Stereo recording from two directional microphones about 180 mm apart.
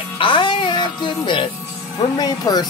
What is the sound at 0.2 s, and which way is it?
Music, 25° left (ahead or behind).